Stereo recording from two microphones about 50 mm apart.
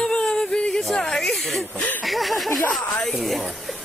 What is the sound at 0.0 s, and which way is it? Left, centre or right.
Music, centre.